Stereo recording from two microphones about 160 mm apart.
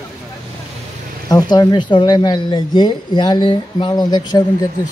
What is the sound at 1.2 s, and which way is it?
Speech, 25° left (ahead or behind).